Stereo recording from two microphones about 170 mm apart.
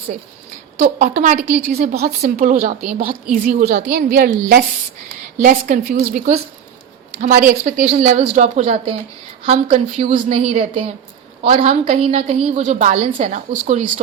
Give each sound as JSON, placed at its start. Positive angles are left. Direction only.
{"t": 0.8, "sound": "a woman's voice", "side_deg": -50}
{"t": 2.3, "sound": "a woman's voice", "side_deg": -55}